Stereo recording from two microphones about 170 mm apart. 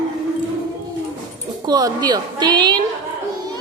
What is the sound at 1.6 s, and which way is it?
A woman's voice, 25° right (ahead or behind).